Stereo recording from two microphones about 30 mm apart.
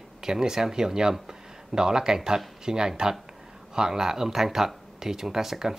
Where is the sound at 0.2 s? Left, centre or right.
Centre.